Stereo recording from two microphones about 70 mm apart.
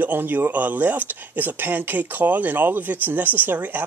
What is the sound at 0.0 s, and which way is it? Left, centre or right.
Speech, right.